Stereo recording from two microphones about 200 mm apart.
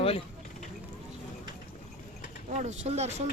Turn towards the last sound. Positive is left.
turn(degrees=-35)  # may be behind; listen again after turning